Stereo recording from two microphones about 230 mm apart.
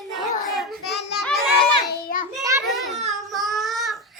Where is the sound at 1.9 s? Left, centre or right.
Left.